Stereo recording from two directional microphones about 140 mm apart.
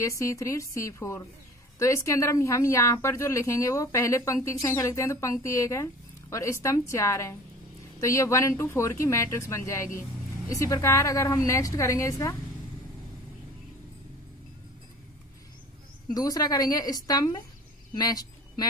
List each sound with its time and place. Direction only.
0.0 s speech: 20° left (ahead or behind)
16.1 s speech: 25° left (ahead or behind)
17.9 s a sound: 25° left (ahead or behind)